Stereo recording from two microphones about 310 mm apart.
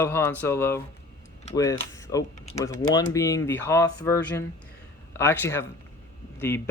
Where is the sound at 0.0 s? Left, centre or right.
Centre.